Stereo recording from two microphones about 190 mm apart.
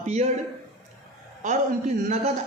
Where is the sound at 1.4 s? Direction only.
40° right (ahead or behind).